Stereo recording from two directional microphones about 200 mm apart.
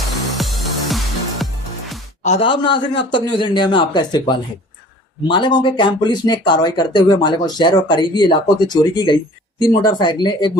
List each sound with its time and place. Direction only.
0.3 s music: centre (ahead or behind)
2.2 s speech: 30° left (ahead or behind)